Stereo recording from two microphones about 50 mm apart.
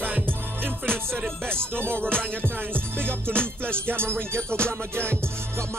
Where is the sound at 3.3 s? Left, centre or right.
Left.